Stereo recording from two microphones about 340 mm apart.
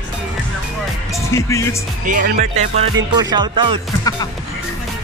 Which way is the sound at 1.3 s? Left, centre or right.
Centre.